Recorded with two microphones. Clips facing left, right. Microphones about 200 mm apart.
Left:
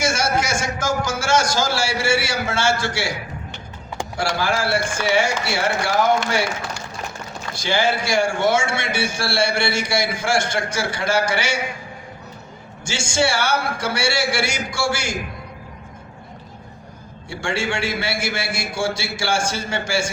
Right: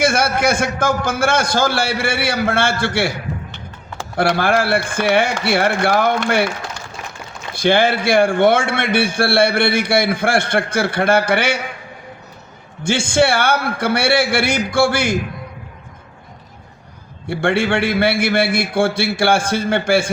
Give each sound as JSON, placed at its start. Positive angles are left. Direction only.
{"t": 0.0, "sound": "a man's voice", "side_deg": -55}
{"t": 4.2, "sound": "a man's voice", "side_deg": -55}
{"t": 7.5, "sound": "a man's voice", "side_deg": -55}
{"t": 12.8, "sound": "a man's voice", "side_deg": -55}
{"t": 17.2, "sound": "a man's voice", "side_deg": -60}